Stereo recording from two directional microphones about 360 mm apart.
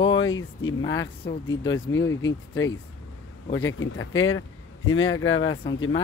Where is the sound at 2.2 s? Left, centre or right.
Left.